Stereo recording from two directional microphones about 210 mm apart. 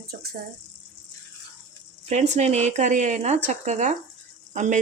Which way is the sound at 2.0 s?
35° right (ahead or behind).